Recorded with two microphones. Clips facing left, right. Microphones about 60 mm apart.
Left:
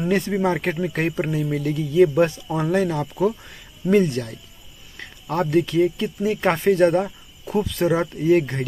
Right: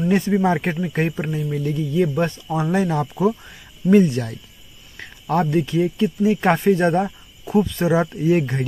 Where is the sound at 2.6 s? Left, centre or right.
Right.